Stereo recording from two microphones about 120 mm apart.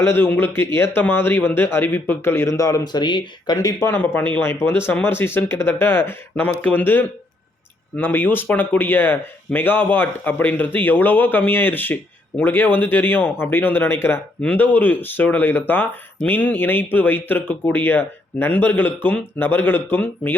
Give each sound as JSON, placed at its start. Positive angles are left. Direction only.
{"t": 0.0, "sound": "speech", "side_deg": 20}